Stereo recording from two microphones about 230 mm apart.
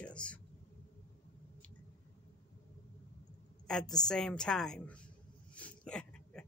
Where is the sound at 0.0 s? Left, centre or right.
Centre.